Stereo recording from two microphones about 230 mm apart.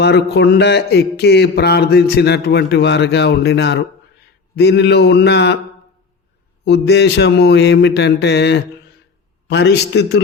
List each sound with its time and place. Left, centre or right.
0.0 s speech: left
6.7 s speech: left